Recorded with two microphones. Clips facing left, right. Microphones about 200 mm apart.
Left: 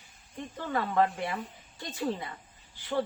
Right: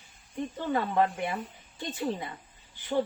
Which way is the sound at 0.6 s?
20° right (ahead or behind).